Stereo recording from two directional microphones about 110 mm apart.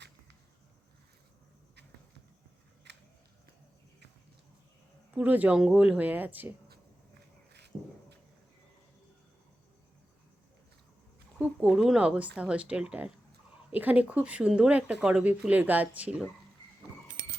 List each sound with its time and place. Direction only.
5.1 s speech: 15° right (ahead or behind)
7.7 s a sound: 5° right (ahead or behind)
11.3 s speech: 5° right (ahead or behind)